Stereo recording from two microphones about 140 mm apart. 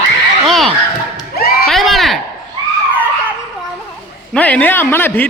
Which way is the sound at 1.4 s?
90° left.